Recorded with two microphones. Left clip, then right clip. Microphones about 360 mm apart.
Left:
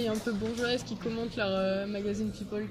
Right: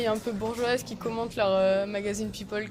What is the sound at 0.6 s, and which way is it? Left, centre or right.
Speech, centre.